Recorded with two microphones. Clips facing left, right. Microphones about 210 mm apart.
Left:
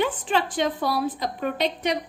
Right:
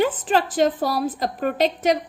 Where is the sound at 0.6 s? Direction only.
45° right (ahead or behind).